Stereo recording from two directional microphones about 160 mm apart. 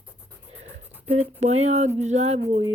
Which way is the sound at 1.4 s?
45° right (ahead or behind).